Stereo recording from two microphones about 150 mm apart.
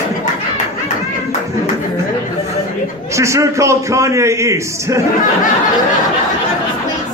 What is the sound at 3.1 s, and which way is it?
A man's voice, 20° right (ahead or behind).